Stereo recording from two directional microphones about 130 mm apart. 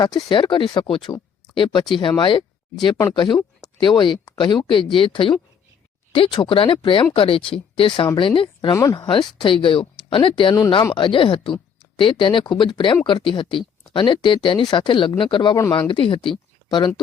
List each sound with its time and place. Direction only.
0.0 s speech: 30° left (ahead or behind)
8.7 s speech: 25° left (ahead or behind)
9.0 s speech: 40° left (ahead or behind)